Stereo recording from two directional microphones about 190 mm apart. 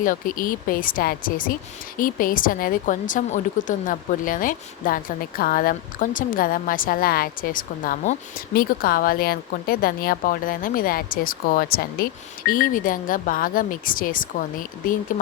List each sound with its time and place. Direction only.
0.0 s a woman's voice: 45° left (ahead or behind)